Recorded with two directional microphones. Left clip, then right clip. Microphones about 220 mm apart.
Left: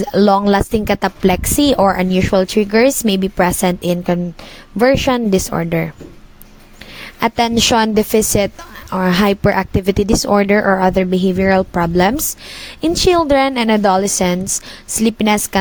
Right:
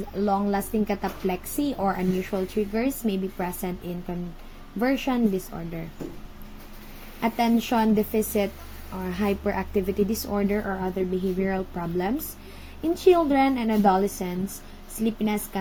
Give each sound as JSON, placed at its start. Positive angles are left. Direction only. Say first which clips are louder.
{"t": 0.0, "sound": "a woman's voice", "louder": "left 13 dB", "side_deg": 45}
{"t": 7.2, "sound": "a woman's voice", "louder": "left 10 dB", "side_deg": 50}